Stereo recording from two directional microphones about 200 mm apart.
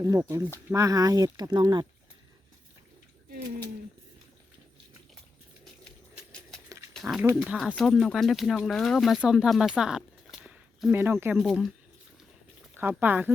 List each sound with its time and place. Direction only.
0.2 s speech: 10° right (ahead or behind)
6.7 s dog: 15° right (ahead or behind)
6.9 s speech: centre (ahead or behind)
10.4 s a sound: 5° right (ahead or behind)
11.3 s speech: centre (ahead or behind)
12.7 s speech: 10° right (ahead or behind)